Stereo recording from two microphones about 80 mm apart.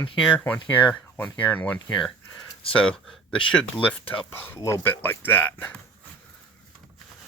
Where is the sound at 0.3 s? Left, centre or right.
Centre.